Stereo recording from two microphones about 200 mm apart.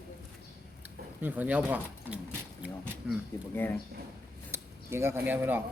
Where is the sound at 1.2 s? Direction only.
10° right (ahead or behind).